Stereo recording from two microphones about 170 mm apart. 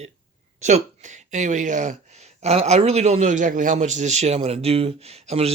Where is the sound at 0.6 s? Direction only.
45° right (ahead or behind).